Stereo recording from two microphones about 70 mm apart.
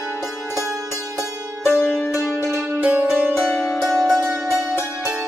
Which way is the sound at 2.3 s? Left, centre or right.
Right.